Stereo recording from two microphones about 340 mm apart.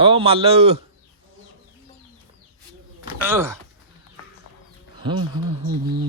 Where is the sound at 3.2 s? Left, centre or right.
Centre.